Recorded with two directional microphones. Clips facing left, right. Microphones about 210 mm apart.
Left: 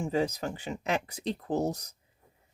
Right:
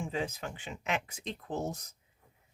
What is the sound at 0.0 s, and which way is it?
Speech, 40° left (ahead or behind).